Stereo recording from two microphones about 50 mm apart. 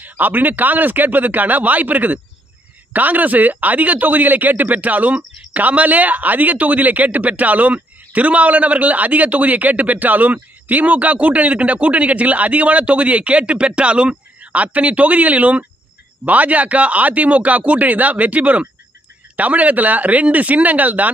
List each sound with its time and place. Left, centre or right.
0.0 s speech: right